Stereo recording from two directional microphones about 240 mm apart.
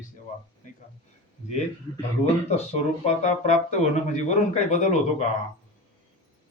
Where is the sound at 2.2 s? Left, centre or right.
Left.